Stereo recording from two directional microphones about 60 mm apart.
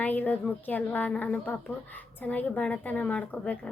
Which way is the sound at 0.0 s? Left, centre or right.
Left.